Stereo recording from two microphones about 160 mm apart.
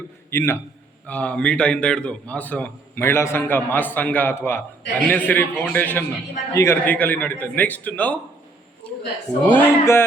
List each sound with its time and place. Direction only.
0.3 s a man's voice: 15° left (ahead or behind)
8.8 s a sound: 5° left (ahead or behind)
9.4 s a man's voice: 10° left (ahead or behind)